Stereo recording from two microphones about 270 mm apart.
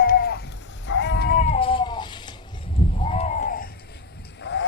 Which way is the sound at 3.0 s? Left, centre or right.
Left.